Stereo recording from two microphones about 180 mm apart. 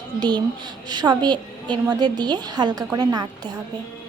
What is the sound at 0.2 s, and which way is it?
A woman's voice, 25° right (ahead or behind).